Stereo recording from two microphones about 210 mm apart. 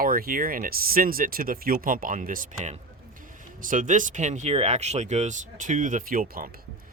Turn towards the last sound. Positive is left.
turn(degrees=-45)  # may be behind; listen again after turning